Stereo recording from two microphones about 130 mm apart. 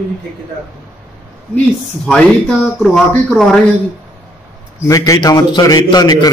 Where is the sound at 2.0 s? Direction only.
5° left (ahead or behind).